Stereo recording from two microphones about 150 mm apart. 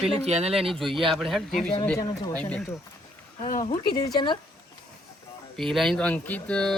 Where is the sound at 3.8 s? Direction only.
25° left (ahead or behind).